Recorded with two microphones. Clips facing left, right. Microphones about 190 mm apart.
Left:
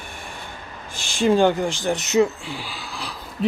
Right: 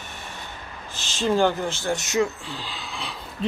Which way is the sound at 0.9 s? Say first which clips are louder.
Left 4 dB; 15° left (ahead or behind).